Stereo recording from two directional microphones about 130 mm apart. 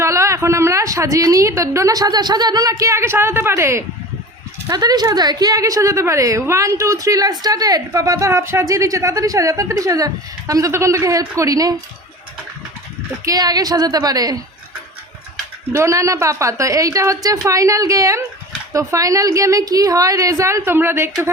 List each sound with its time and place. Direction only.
0.0 s a woman's voice: 25° right (ahead or behind)
13.2 s a woman's voice: 30° right (ahead or behind)
15.7 s a woman's voice: 20° right (ahead or behind)